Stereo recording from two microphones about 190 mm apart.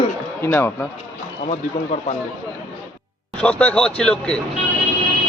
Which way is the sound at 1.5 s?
35° left (ahead or behind).